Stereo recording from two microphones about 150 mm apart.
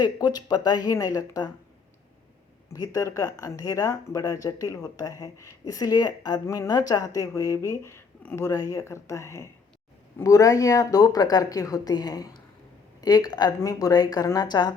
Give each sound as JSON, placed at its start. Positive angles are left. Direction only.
{"t": 0.0, "sound": "speech", "side_deg": 25}
{"t": 2.7, "sound": "speech", "side_deg": 25}